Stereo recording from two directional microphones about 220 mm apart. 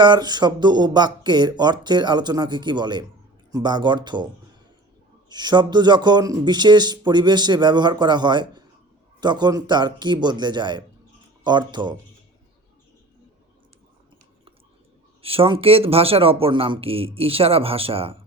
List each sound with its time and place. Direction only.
0.0 s a man's voice: 20° right (ahead or behind)
5.3 s a man's voice: 20° right (ahead or behind)
15.2 s a man's voice: 25° right (ahead or behind)